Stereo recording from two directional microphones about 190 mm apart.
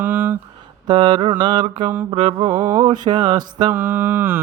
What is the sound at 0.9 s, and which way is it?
Speech, 25° right (ahead or behind).